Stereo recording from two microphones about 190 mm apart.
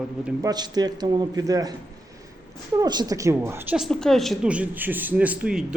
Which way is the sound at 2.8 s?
20° right (ahead or behind).